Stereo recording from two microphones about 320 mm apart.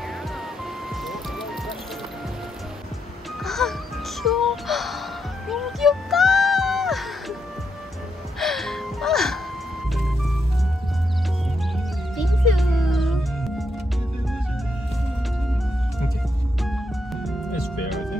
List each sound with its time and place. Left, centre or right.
3.4 s music: centre
8.4 s music: centre
12.2 s music: centre
16.6 s music: centre